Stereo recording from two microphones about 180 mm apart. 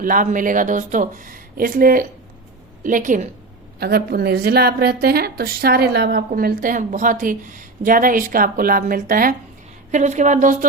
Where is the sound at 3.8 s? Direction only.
60° right (ahead or behind).